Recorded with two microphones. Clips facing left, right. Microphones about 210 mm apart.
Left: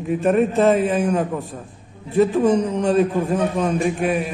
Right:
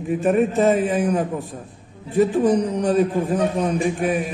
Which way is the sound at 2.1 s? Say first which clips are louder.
Left 1 dB; 15° right (ahead or behind).